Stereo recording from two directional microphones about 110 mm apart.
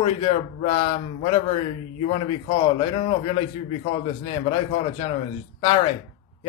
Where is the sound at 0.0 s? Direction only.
55° left (ahead or behind).